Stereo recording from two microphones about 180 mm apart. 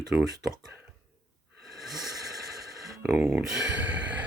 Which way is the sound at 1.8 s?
Centre (ahead or behind).